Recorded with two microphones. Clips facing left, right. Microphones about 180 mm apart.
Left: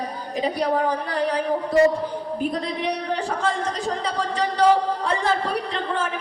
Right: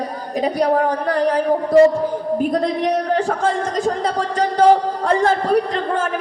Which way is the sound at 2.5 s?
45° right (ahead or behind).